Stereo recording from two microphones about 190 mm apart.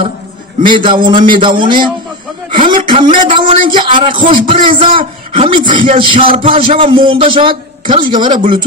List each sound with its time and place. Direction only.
0.7 s a man's voice: 25° right (ahead or behind)